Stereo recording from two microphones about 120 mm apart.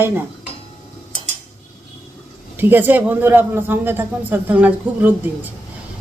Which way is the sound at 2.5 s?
15° right (ahead or behind).